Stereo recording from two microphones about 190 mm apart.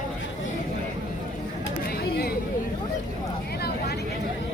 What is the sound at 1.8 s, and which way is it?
Chatter, 55° left (ahead or behind).